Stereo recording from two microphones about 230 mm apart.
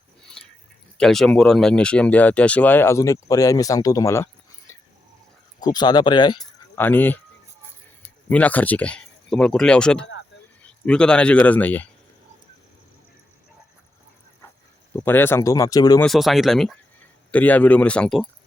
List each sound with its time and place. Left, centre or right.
0.9 s speech: centre
5.5 s speech: centre
6.4 s speech: centre
8.3 s a man's voice: centre
14.9 s speech: centre
16.0 s speech: centre